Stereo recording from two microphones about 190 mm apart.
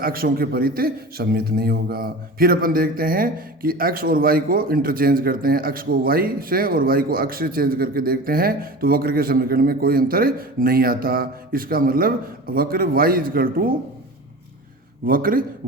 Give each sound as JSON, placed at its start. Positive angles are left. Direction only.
{"t": 0.0, "sound": "a man's voice", "side_deg": -50}
{"t": 15.0, "sound": "a man's voice", "side_deg": -50}